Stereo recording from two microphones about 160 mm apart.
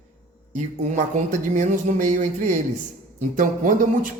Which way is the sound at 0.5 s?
50° right (ahead or behind).